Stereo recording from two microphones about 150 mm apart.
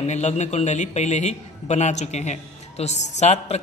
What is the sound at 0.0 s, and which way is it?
A man's voice, 50° left (ahead or behind).